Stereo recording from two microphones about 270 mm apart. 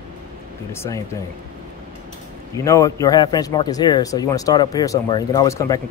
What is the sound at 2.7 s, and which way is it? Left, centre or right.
A man's voice, centre.